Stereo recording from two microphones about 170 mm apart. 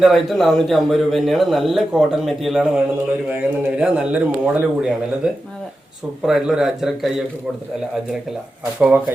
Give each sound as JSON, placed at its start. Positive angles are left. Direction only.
{"t": 0.0, "sound": "a man's voice", "side_deg": 0}
{"t": 8.8, "sound": "a man's voice", "side_deg": -10}